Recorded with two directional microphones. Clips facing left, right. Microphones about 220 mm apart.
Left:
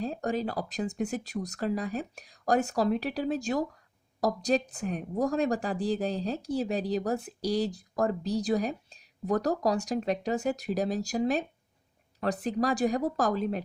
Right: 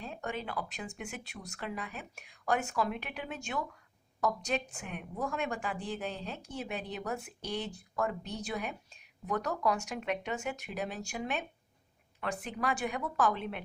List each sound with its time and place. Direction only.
0.0 s a woman's voice: 35° left (ahead or behind)